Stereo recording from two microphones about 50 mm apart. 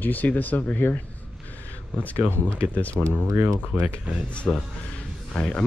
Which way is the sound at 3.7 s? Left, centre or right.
Right.